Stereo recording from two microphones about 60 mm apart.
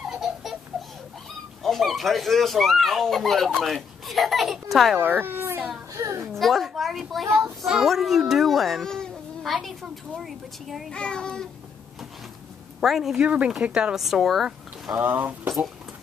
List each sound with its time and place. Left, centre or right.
0.1 s baby laughter: centre
1.6 s speech: centre
4.9 s a sound: right
5.9 s a sound: right
6.3 s a child's voice: centre
10.9 s a child's voice: centre
12.8 s speech: centre
15.0 s speech: right